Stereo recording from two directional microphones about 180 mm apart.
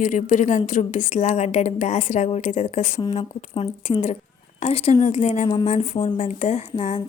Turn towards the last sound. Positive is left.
turn(degrees=35)  # may be behind; listen again after turning